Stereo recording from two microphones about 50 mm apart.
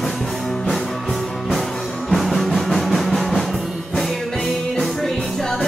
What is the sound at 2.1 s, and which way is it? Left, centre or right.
Music, centre.